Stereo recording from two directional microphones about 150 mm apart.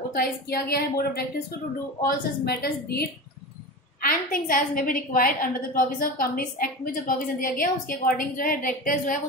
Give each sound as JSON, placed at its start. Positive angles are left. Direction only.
{"t": 0.1, "sound": "a woman's voice", "side_deg": 85}
{"t": 4.0, "sound": "a woman's voice", "side_deg": 70}